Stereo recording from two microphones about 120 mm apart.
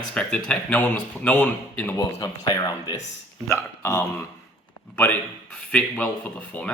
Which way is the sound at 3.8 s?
20° left (ahead or behind).